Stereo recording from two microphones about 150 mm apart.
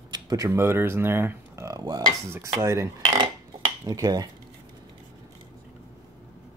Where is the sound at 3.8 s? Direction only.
25° right (ahead or behind).